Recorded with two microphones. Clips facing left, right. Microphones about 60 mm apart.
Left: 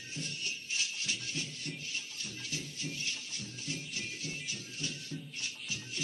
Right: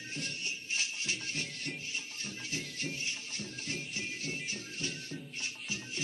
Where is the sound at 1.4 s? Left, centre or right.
Right.